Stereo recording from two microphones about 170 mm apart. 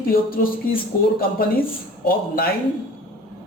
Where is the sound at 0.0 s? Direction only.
60° left (ahead or behind).